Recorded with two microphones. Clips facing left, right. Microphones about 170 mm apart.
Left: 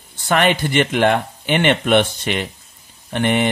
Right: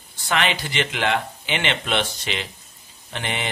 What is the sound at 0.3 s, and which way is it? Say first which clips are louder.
Speech: left 7 dB; 50° left (ahead or behind).